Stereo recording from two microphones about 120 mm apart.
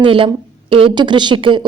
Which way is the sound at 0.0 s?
45° right (ahead or behind).